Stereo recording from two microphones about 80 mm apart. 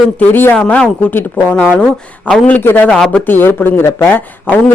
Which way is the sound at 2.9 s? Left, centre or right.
Centre.